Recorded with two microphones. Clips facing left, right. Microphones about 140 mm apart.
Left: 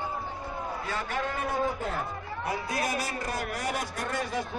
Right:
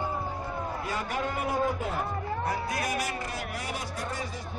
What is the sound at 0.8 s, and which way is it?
Speech, 10° right (ahead or behind).